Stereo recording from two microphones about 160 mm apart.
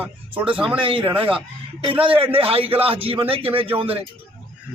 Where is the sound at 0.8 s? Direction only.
35° right (ahead or behind).